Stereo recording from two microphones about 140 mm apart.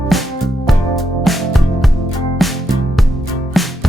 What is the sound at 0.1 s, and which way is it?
Music, centre (ahead or behind).